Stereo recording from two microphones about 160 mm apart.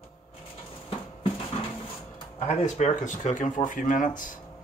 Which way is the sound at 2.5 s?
45° left (ahead or behind).